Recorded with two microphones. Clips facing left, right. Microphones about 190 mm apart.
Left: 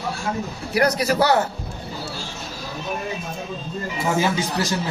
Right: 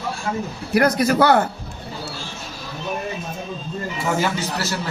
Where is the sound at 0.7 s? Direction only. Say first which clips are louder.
Right 3 dB; 50° right (ahead or behind).